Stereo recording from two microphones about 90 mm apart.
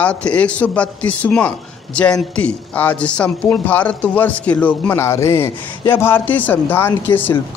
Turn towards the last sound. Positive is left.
turn(degrees=25)  # may be behind; listen again after turning